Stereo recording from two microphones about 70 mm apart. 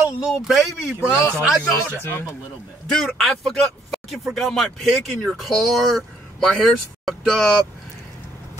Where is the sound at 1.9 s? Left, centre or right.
Left.